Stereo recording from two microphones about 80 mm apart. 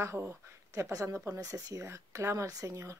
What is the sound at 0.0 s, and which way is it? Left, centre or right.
Speech, right.